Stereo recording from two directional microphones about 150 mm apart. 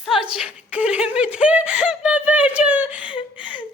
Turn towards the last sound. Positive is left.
turn(degrees=-10)  # may be behind; listen again after turning